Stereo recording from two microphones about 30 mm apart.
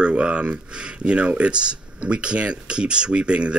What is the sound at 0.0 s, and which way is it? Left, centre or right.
Speech, right.